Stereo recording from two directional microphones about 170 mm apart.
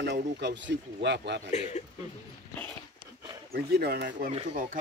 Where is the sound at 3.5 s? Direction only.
70° right (ahead or behind).